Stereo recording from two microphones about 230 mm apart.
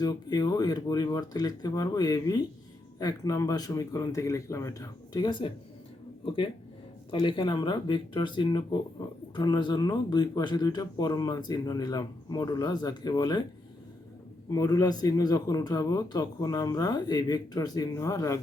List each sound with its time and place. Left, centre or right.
0.0 s speech: centre
14.5 s speech: centre